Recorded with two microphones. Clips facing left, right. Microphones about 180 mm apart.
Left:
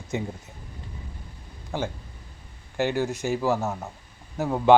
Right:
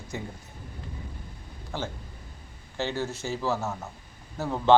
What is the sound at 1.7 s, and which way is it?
A man's voice, 15° left (ahead or behind).